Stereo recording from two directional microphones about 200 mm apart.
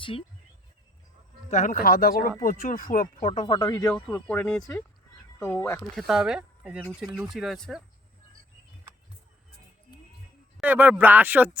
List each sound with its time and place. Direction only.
0.0 s speech: 25° left (ahead or behind)
1.5 s speech: 40° left (ahead or behind)
3.2 s speech: 25° left (ahead or behind)
3.8 s speech: 5° left (ahead or behind)
6.0 s speech: centre (ahead or behind)
10.6 s speech: 5° right (ahead or behind)